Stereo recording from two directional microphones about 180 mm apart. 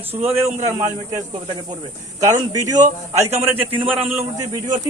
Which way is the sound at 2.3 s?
20° right (ahead or behind).